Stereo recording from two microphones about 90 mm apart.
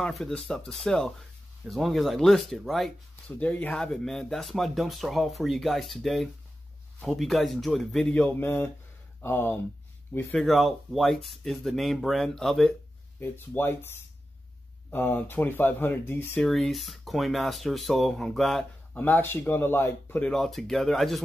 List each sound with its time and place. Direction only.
0.0 s speech: 5° left (ahead or behind)
3.3 s speech: 15° left (ahead or behind)
8.1 s speech: 15° left (ahead or behind)
10.4 s speech: centre (ahead or behind)
13.2 s speech: 25° left (ahead or behind)
14.9 s speech: 20° left (ahead or behind)
16.3 s speech: 5° left (ahead or behind)
18.9 s speech: 20° left (ahead or behind)
20.2 s speech: 5° left (ahead or behind)